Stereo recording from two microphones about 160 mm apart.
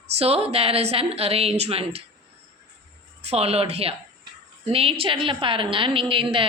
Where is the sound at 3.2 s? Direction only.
40° right (ahead or behind).